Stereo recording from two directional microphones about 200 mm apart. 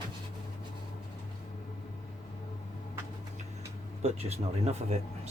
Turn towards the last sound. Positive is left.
turn(degrees=-35)  # may be behind; listen again after turning